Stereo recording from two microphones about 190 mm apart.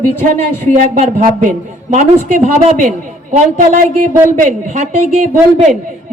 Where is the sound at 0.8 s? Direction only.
45° right (ahead or behind).